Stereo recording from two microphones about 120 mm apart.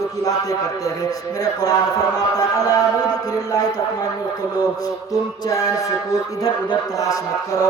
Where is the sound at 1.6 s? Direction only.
30° left (ahead or behind).